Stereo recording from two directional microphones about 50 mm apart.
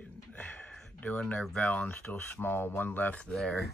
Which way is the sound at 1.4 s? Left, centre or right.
Centre.